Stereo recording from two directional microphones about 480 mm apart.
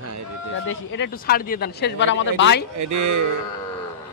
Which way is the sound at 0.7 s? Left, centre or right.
Left.